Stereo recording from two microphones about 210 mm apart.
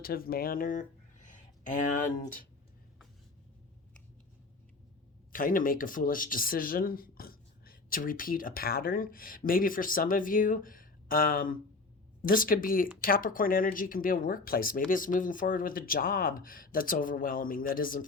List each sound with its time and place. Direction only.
0.0 s speech: 45° left (ahead or behind)
5.3 s speech: 40° left (ahead or behind)